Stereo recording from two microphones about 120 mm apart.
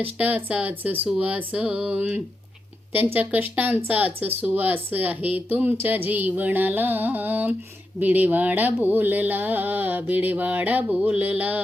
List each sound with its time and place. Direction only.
0.0 s speech: 15° right (ahead or behind)